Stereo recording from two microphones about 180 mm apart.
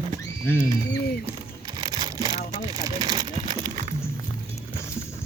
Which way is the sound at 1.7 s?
25° right (ahead or behind).